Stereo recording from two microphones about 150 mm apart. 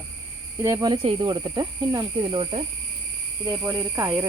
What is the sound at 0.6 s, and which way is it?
Speech, 25° right (ahead or behind).